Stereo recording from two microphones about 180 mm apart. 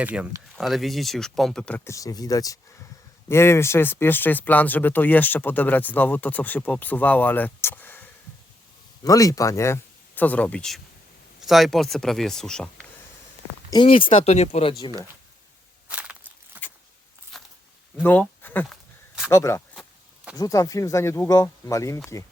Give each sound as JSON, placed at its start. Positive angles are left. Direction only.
{"t": 0.0, "sound": "speech", "side_deg": -5}
{"t": 9.0, "sound": "speech", "side_deg": 20}
{"t": 13.7, "sound": "speech", "side_deg": 25}
{"t": 15.9, "sound": "walk", "side_deg": -5}
{"t": 18.0, "sound": "speech", "side_deg": 10}